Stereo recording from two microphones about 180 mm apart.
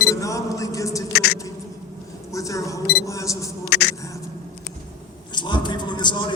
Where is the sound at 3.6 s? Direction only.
65° left (ahead or behind).